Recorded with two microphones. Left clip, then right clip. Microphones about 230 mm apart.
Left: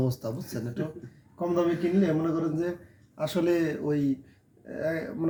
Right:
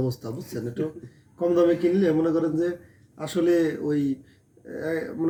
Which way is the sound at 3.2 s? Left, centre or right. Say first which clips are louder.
Right 4 dB; centre.